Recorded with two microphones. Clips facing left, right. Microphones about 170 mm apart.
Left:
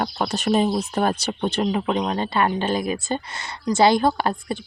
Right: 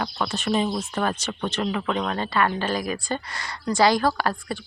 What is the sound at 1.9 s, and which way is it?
A woman's voice, 15° left (ahead or behind).